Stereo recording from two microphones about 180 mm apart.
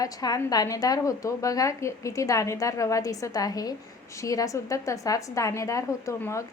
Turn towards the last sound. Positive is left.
turn(degrees=15)  # may be behind; listen again after turning